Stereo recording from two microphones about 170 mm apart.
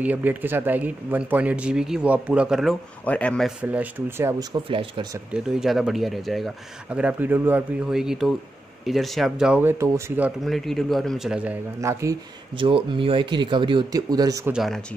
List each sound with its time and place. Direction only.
0.0 s speech: 10° right (ahead or behind)
3.6 s speech: 10° right (ahead or behind); by 5.0 s 30° right (ahead or behind)
5.3 s speech: 5° right (ahead or behind)
10.4 s speech: centre (ahead or behind)
11.8 s speech: 15° right (ahead or behind)
12.5 s speech: 30° right (ahead or behind)
14.5 s speech: centre (ahead or behind)